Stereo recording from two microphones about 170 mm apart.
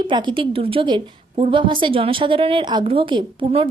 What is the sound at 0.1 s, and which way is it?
A woman's voice, 30° right (ahead or behind).